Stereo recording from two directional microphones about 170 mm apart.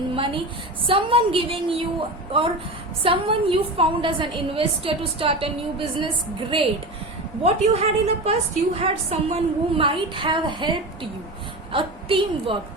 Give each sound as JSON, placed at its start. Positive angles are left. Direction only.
{"t": 0.2, "sound": "a woman's voice", "side_deg": -30}
{"t": 6.5, "sound": "a woman's voice", "side_deg": -30}
{"t": 11.7, "sound": "a woman's voice", "side_deg": -30}